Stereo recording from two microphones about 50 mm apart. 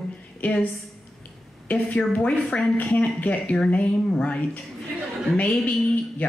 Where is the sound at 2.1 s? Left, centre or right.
Left.